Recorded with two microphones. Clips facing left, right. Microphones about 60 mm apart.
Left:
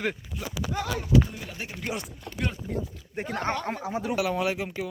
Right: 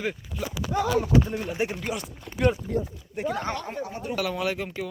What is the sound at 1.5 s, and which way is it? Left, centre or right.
Speech, right.